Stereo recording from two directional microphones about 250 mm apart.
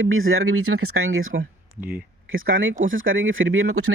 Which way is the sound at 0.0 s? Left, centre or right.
Right.